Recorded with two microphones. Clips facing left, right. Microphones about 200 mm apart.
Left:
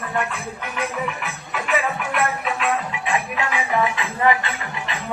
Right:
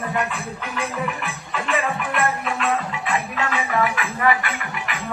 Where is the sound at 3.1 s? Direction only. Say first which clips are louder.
Left 1 dB; 20° left (ahead or behind).